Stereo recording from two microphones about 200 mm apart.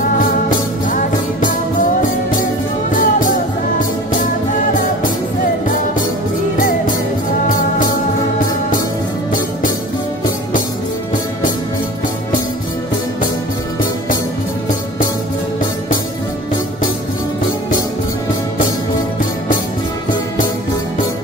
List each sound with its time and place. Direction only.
0.5 s music: 40° left (ahead or behind)
2.9 s music: 45° left (ahead or behind)